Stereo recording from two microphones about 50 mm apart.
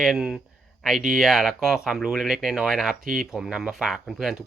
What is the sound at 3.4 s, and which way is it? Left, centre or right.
Speech, centre.